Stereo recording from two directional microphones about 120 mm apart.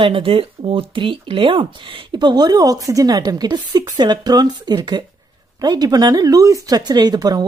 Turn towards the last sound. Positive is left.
turn(degrees=-35)  # may be behind; listen again after turning